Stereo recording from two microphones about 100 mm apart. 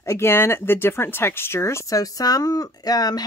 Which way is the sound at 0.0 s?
25° left (ahead or behind).